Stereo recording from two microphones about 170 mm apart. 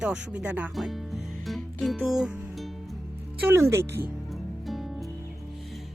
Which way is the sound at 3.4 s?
15° right (ahead or behind).